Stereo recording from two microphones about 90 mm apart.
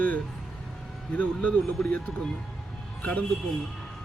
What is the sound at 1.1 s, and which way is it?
Speech, 15° left (ahead or behind).